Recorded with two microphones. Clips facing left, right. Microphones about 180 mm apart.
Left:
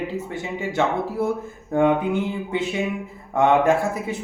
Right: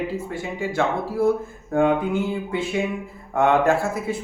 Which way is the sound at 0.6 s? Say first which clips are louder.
Left 1 dB; 20° left (ahead or behind).